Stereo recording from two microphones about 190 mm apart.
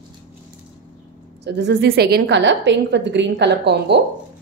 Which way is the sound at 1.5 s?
60° right (ahead or behind).